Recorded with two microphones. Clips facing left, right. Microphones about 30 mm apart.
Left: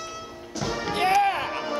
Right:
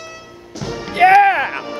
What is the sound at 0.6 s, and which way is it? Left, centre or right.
Music, centre.